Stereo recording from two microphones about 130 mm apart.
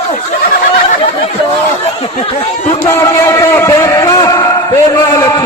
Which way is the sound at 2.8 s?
20° left (ahead or behind).